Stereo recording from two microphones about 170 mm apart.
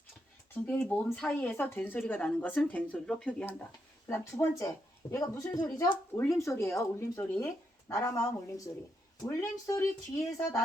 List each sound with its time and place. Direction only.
0.5 s speech: 10° left (ahead or behind)
4.1 s speech: 15° left (ahead or behind)